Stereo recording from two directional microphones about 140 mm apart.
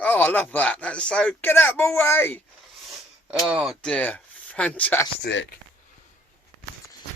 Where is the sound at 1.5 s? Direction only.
15° left (ahead or behind).